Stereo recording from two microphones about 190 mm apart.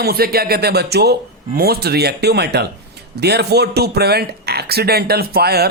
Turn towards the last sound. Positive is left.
turn(degrees=-55)  # may be behind; listen again after turning